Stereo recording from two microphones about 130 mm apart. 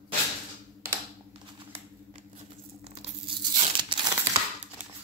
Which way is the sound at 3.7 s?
40° right (ahead or behind).